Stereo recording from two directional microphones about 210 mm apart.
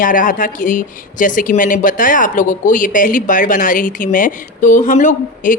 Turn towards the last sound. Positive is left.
turn(degrees=35)  # may be behind; listen again after turning